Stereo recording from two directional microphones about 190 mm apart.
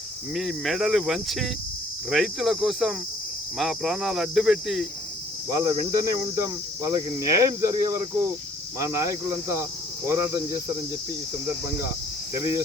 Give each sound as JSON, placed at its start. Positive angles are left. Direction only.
{"t": 0.3, "sound": "speech", "side_deg": 0}
{"t": 5.6, "sound": "speech", "side_deg": -15}